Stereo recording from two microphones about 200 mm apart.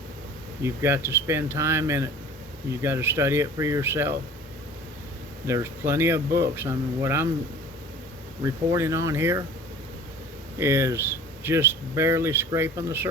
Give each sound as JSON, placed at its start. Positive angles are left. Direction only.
{"t": 0.6, "sound": "speech", "side_deg": -15}
{"t": 5.5, "sound": "speech", "side_deg": -15}
{"t": 8.4, "sound": "speech", "side_deg": -15}
{"t": 10.6, "sound": "speech", "side_deg": -15}